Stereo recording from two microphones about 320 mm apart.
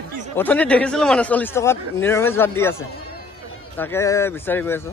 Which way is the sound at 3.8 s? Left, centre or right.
Centre.